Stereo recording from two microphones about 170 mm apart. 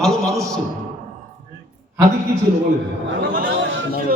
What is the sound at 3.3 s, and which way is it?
Chatter, 75° right (ahead or behind).